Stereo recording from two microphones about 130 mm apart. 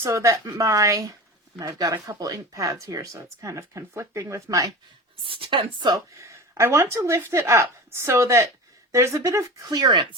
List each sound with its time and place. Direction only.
0.0 s speech: 25° right (ahead or behind)
5.2 s speech: 40° right (ahead or behind)
6.1 s speech: 20° right (ahead or behind); by 10.2 s 35° right (ahead or behind)